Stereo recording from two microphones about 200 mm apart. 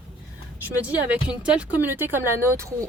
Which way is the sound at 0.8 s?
5° right (ahead or behind).